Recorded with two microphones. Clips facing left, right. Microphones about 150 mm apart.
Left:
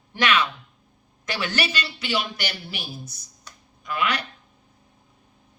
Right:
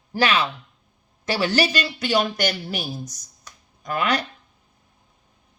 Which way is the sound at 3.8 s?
40° right (ahead or behind).